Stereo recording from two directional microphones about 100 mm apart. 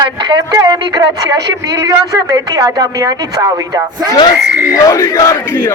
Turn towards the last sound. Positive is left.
turn(degrees=25)  # may be behind; listen again after turning